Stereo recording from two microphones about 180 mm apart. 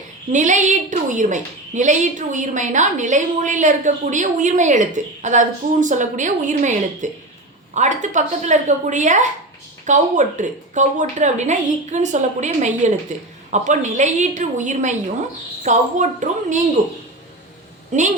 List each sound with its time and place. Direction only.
0.3 s a woman's voice: 40° right (ahead or behind)